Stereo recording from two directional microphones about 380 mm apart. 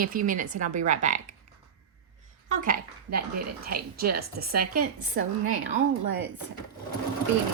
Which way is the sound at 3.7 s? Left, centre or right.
Right.